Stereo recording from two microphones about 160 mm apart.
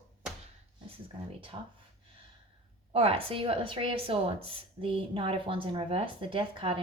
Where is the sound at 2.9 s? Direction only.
35° right (ahead or behind).